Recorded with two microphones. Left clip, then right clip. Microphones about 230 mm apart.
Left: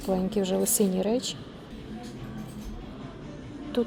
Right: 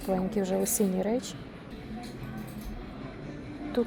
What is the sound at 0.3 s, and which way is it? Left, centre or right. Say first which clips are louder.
Speech: left 4 dB; centre.